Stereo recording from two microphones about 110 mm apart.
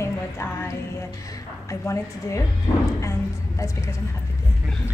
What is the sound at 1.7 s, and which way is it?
Speech, 30° left (ahead or behind).